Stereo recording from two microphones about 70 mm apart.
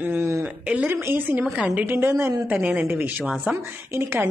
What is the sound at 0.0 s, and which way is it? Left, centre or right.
Speech, right.